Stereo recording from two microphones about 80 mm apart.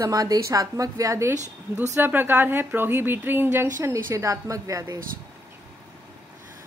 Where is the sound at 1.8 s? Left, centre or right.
Right.